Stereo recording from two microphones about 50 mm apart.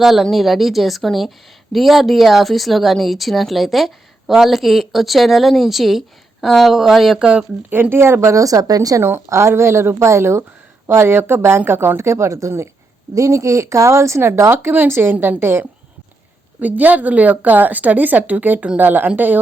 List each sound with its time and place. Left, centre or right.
0.0 s speech: centre
7.7 s speech: right
8.2 s a woman's voice: right
9.0 s speech: right
9.3 s speech: right
10.8 s speech: right
13.2 s a woman's voice: right
14.2 s speech: right
15.1 s a woman's voice: right
15.4 s speech: right
16.6 s a woman's voice: right